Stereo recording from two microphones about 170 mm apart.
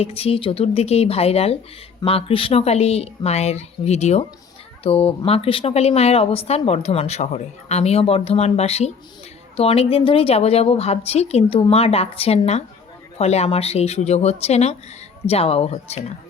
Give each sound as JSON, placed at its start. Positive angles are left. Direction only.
{"t": 0.0, "sound": "speech", "side_deg": 35}